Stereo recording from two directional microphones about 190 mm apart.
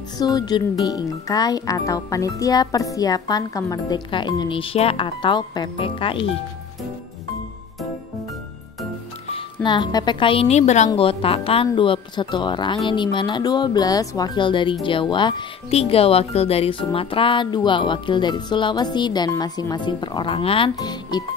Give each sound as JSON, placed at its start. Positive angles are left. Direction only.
{"t": 0.2, "sound": "speech", "side_deg": 20}
{"t": 9.3, "sound": "speech", "side_deg": 25}